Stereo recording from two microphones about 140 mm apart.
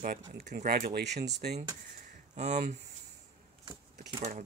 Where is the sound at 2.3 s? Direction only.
55° right (ahead or behind).